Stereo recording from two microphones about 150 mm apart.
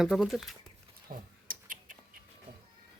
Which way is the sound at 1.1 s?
75° right (ahead or behind).